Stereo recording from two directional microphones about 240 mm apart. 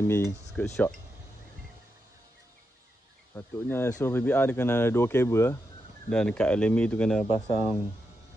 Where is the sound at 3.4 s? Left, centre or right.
Centre.